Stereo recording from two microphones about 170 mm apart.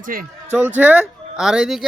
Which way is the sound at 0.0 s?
60° right (ahead or behind).